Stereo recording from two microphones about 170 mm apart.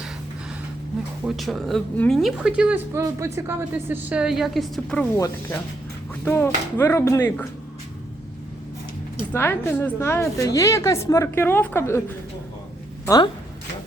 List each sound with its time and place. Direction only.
1.2 s a woman's voice: centre (ahead or behind)
5.1 s a woman's voice: 15° left (ahead or behind)
9.3 s a woman's voice: 15° left (ahead or behind)
13.1 s speech: 25° left (ahead or behind)